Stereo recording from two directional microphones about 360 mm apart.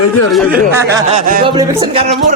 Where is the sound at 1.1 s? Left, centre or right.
Right.